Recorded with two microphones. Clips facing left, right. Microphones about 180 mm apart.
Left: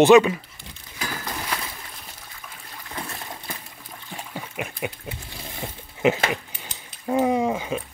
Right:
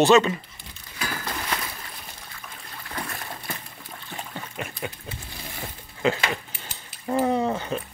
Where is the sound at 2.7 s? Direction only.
15° left (ahead or behind).